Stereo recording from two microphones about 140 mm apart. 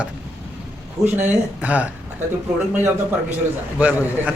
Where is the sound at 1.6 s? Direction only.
10° right (ahead or behind).